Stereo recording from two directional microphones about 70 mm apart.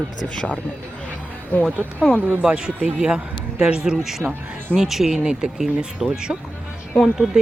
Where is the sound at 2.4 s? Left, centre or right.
Centre.